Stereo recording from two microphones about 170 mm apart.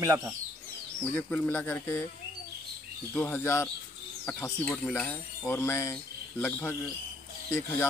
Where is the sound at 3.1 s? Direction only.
10° left (ahead or behind).